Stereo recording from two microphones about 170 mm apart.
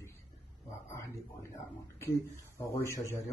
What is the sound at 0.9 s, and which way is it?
A man's voice, 15° left (ahead or behind).